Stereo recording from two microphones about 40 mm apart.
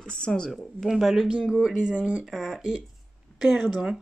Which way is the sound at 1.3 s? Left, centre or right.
Right.